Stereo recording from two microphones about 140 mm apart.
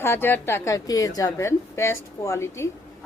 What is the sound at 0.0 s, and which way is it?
A woman's voice, 15° left (ahead or behind).